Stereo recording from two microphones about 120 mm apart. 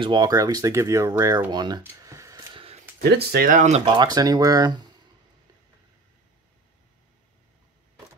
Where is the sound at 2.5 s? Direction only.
55° right (ahead or behind).